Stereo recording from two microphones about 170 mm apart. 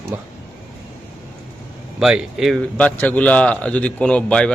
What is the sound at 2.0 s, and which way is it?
A man's voice, 5° right (ahead or behind).